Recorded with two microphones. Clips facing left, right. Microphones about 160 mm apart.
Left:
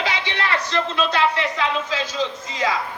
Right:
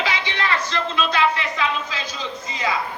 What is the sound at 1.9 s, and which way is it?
Speech, 90° left.